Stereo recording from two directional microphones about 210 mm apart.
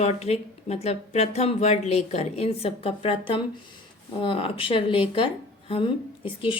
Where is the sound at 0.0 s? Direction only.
30° left (ahead or behind).